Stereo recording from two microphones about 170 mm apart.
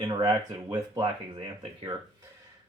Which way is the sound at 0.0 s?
25° right (ahead or behind).